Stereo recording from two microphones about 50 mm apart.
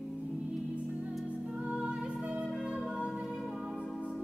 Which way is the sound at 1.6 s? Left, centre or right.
Right.